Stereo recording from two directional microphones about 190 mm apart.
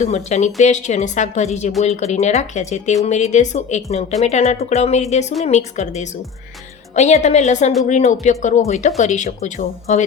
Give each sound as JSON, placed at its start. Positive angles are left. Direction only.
{"t": 0.0, "sound": "speech", "side_deg": 40}